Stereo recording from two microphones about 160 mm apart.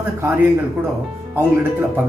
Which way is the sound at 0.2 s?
15° right (ahead or behind).